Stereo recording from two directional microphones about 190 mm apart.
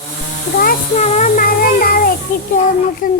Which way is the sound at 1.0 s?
40° left (ahead or behind).